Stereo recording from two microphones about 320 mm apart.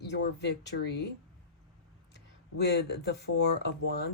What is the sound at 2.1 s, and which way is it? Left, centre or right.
Speech, left.